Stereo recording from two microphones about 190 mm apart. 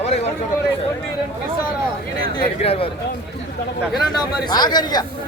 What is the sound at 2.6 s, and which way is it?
Speech, 30° left (ahead or behind).